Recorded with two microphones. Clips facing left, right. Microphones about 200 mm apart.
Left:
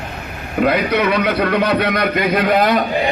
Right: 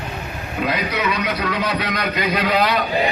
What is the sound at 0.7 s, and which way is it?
A man's voice, 60° left (ahead or behind).